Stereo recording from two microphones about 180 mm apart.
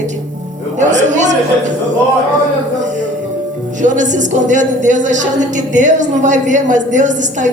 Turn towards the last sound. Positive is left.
turn(degrees=-45)  # may be behind; listen again after turning